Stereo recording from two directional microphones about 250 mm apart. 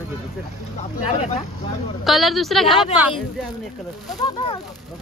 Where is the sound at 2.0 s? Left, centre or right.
Centre.